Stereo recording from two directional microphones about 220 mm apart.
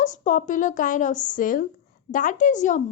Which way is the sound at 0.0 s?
35° left (ahead or behind).